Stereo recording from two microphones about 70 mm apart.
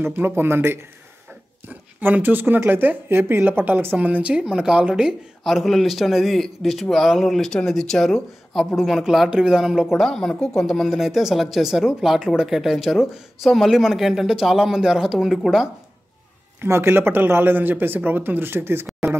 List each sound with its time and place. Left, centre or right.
0.0 s speech: right
1.7 s speech: right
5.4 s speech: centre
9.9 s speech: centre
16.6 s speech: right